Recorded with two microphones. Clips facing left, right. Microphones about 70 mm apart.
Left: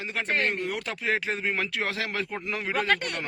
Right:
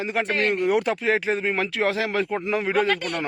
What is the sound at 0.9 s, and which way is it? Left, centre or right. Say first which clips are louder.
Speech: right 6 dB; centre.